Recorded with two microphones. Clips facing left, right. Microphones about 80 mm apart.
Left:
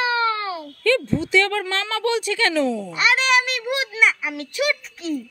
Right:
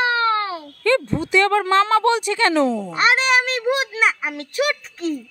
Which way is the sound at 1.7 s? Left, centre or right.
Right.